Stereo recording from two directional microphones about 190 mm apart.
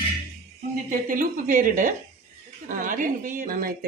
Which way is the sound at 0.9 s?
45° right (ahead or behind).